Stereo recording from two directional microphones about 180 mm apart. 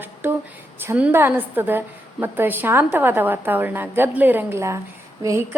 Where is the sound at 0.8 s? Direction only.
10° right (ahead or behind).